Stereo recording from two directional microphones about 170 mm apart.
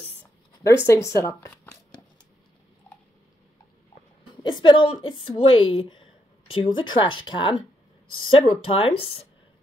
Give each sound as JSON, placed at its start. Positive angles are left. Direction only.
{"t": 0.8, "sound": "speech", "side_deg": 15}
{"t": 4.4, "sound": "a woman's voice", "side_deg": 25}